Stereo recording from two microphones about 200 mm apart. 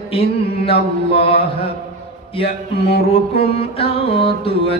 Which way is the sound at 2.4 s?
50° left (ahead or behind).